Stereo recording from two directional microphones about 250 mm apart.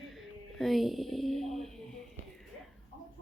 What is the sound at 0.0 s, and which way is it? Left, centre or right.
Speech, centre.